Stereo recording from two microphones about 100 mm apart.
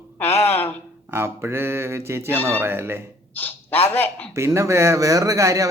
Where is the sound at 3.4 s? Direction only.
20° left (ahead or behind).